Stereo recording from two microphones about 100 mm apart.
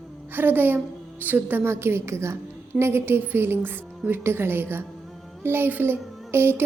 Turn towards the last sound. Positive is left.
turn(degrees=-25)  # may be behind; listen again after turning